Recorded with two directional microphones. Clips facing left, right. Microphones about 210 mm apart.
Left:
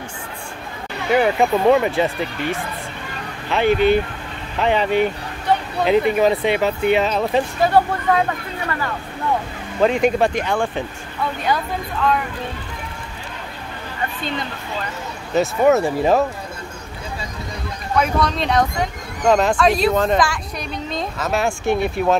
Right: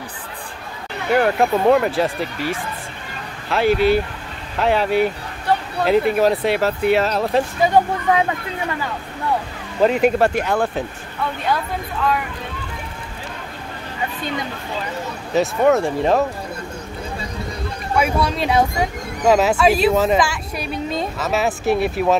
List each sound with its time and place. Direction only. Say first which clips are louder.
1.1 s speech: even; centre (ahead or behind)
7.6 s speech: even; 15° right (ahead or behind)
9.8 s speech: right 1 dB; 5° right (ahead or behind)
15.3 s speech: even; centre (ahead or behind)
17.9 s speech: even; 10° right (ahead or behind)